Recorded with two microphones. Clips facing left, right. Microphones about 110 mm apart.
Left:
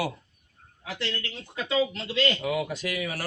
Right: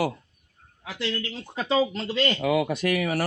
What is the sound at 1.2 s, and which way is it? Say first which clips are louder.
Speech: right 3 dB; 35° right (ahead or behind).